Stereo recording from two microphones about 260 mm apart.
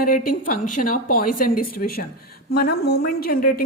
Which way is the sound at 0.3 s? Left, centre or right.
Left.